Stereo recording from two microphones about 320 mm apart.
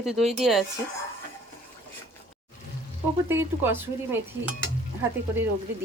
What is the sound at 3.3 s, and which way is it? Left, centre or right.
Speech, centre.